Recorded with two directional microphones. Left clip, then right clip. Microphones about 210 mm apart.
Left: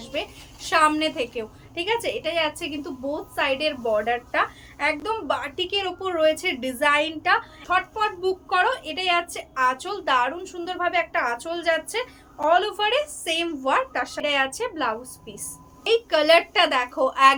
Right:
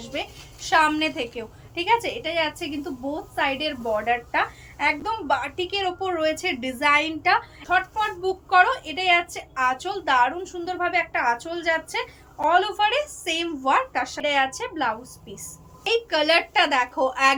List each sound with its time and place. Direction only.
0.7 s a woman's voice: 20° left (ahead or behind)